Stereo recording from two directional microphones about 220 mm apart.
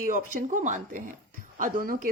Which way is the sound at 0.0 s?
40° right (ahead or behind).